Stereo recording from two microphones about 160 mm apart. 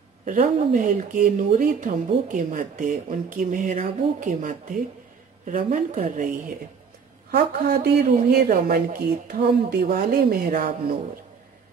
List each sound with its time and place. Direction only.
0.2 s speech: 55° right (ahead or behind)
7.2 s speech: 75° right (ahead or behind)